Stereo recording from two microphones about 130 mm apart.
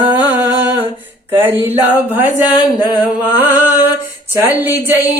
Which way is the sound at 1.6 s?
15° right (ahead or behind).